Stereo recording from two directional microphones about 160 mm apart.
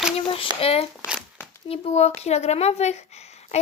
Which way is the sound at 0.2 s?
35° left (ahead or behind).